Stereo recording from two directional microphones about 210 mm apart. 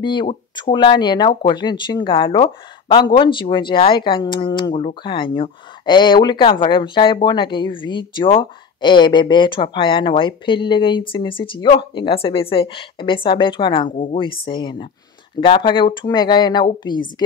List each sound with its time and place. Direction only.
0.0 s speech: 20° left (ahead or behind)